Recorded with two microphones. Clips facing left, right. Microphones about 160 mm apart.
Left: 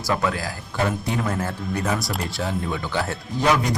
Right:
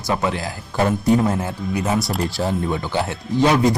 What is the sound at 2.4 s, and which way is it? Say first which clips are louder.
Speech: right 4 dB; 30° right (ahead or behind).